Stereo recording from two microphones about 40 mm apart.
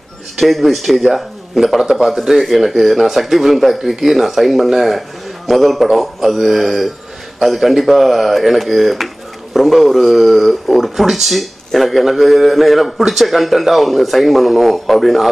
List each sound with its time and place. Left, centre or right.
0.4 s speech: centre